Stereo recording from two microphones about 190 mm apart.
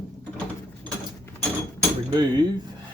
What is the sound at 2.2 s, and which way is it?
Cutlery, 20° right (ahead or behind).